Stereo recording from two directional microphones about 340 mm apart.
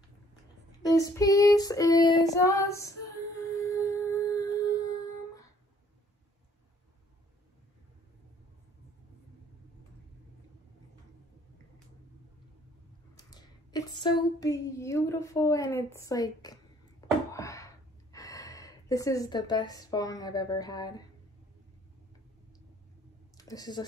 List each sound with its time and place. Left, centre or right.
0.8 s female singing: centre
3.5 s music: centre
13.1 s speech: centre
17.3 s a sound: centre
18.1 s speech: centre
23.3 s a sound: centre